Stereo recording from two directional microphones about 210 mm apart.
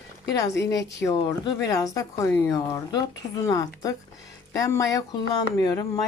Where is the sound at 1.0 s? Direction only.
15° left (ahead or behind).